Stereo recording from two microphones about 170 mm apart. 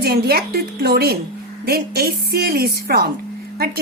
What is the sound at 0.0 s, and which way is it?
A woman's voice, 65° right (ahead or behind).